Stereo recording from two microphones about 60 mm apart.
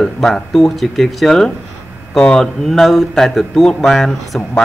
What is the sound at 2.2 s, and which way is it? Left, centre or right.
Speech, centre.